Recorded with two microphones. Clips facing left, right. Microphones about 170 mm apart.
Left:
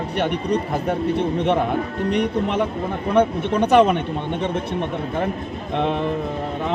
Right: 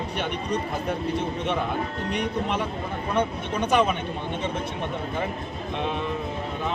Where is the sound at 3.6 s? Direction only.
65° left (ahead or behind).